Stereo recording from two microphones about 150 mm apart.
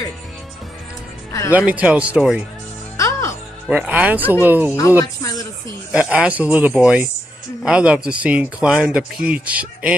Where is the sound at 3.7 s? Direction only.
10° right (ahead or behind).